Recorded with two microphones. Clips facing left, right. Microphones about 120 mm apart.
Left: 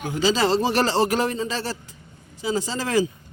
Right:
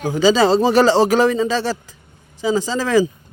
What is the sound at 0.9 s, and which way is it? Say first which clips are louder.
A man's voice: right 7 dB; 90° right.